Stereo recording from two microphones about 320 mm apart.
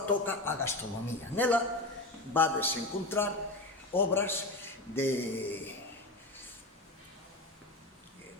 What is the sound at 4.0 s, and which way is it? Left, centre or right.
Mantra, centre.